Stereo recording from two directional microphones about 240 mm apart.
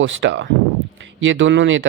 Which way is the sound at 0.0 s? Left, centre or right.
Right.